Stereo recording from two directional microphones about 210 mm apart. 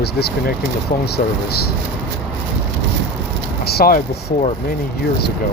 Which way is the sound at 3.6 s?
50° left (ahead or behind).